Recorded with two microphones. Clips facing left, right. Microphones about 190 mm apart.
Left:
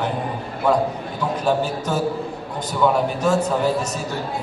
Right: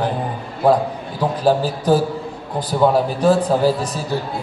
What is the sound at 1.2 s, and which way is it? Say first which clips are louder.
A man's voice: right 4 dB; 35° right (ahead or behind).